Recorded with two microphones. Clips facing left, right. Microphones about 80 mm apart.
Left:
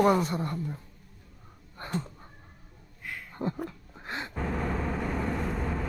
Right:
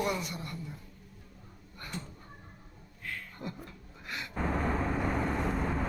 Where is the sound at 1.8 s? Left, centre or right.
Left.